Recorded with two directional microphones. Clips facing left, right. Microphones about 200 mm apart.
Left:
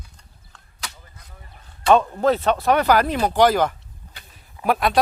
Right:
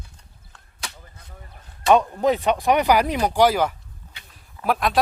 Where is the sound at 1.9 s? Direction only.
15° right (ahead or behind).